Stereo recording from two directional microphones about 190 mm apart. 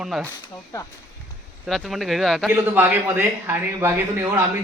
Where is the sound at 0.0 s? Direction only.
Centre (ahead or behind).